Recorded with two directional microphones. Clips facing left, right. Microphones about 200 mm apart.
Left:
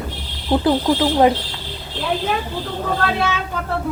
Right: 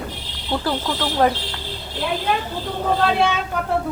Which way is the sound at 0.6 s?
15° left (ahead or behind).